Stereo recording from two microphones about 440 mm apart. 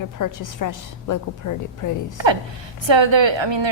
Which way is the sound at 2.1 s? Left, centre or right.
Right.